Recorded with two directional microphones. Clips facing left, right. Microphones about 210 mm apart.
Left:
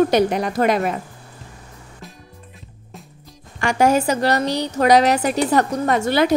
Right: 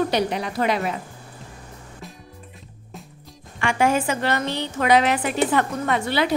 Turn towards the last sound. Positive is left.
turn(degrees=45)  # may be behind; listen again after turning